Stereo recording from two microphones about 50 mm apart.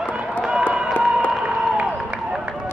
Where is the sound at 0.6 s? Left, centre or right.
Right.